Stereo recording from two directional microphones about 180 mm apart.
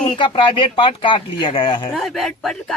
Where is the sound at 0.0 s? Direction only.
25° left (ahead or behind).